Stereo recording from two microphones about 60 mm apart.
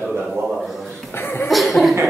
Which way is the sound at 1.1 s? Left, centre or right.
Left.